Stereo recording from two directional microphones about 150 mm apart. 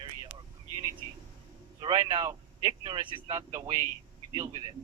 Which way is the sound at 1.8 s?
30° right (ahead or behind).